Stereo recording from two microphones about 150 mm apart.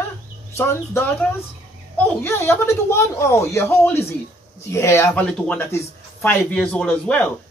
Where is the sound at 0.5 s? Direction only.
15° left (ahead or behind).